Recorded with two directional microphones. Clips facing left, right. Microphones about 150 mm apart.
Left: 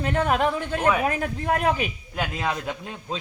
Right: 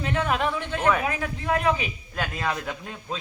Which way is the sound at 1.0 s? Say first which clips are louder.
Left 3 dB; 50° left (ahead or behind).